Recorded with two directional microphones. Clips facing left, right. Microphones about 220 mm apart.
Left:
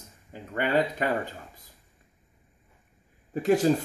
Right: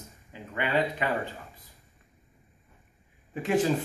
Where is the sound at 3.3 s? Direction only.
40° left (ahead or behind).